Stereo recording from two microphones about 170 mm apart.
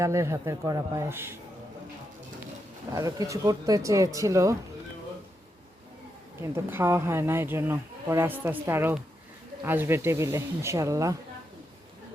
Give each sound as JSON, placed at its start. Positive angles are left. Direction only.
{"t": 0.0, "sound": "speech", "side_deg": -15}
{"t": 2.9, "sound": "speech", "side_deg": -20}
{"t": 6.4, "sound": "speech", "side_deg": -15}